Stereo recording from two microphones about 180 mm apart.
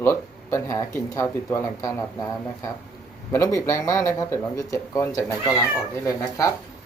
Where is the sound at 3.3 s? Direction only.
15° left (ahead or behind).